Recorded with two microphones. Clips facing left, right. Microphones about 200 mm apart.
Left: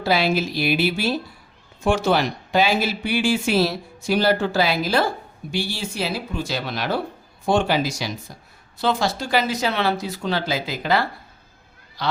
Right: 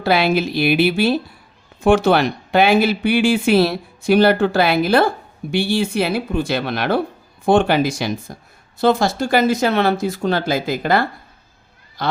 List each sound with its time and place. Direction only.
0.0 s speech: 60° right (ahead or behind)